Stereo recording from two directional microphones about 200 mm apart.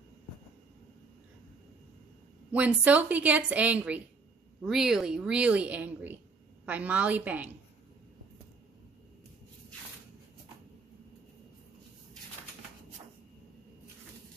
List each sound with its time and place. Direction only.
2.5 s a woman's voice: 10° right (ahead or behind)